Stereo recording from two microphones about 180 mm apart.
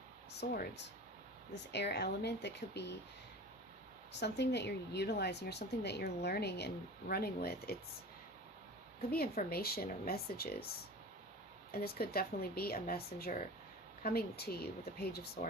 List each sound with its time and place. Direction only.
0.3 s a woman's voice: 65° left (ahead or behind)
4.1 s a woman's voice: 70° left (ahead or behind)
9.0 s speech: 60° left (ahead or behind)
11.7 s speech: 60° left (ahead or behind)